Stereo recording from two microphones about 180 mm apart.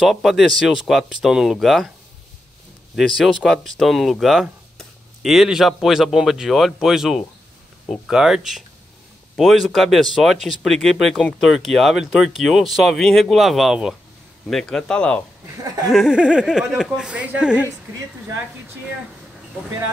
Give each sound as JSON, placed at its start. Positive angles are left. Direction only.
{"t": 0.0, "sound": "speech", "side_deg": 0}
{"t": 3.2, "sound": "speech", "side_deg": 0}
{"t": 9.4, "sound": "speech", "side_deg": 0}
{"t": 15.6, "sound": "a sound", "side_deg": -20}
{"t": 15.9, "sound": "speech", "side_deg": -5}